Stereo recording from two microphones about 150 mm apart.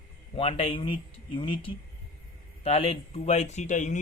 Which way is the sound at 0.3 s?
40° left (ahead or behind).